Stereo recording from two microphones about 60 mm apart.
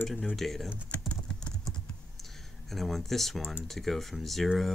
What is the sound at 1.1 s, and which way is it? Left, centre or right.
Typing, centre.